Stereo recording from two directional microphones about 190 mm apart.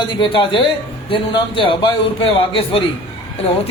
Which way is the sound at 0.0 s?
25° left (ahead or behind).